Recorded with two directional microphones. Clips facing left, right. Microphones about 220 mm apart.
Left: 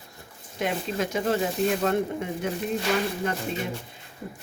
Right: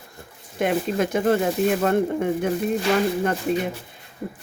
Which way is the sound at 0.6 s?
55° right (ahead or behind).